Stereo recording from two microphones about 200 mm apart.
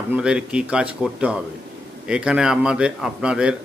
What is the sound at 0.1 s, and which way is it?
A man's voice, 5° right (ahead or behind).